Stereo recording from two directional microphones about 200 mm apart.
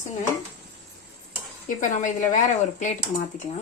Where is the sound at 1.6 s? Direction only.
40° left (ahead or behind).